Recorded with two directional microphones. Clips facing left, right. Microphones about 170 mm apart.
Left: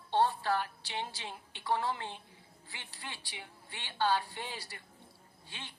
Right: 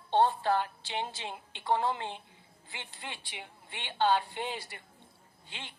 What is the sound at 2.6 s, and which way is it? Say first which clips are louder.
A woman's voice: right 3 dB; 20° right (ahead or behind).